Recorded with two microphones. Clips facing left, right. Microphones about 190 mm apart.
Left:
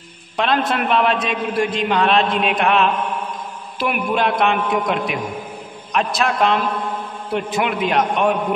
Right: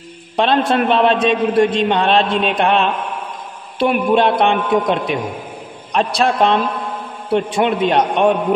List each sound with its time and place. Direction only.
0.4 s a man's voice: 30° right (ahead or behind)